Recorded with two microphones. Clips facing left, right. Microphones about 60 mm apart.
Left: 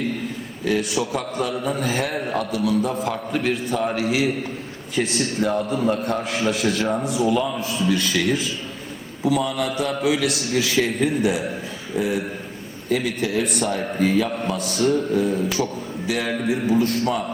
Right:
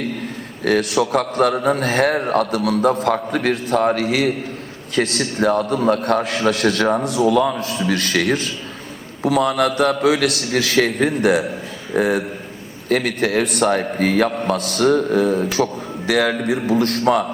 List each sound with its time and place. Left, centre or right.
0.6 s a man's voice: right